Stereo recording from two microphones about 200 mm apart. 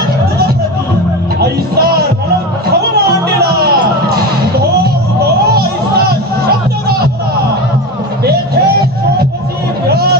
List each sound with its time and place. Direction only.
1.4 s music: 50° right (ahead or behind)